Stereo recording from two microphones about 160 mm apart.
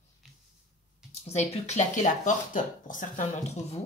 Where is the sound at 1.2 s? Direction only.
40° left (ahead or behind).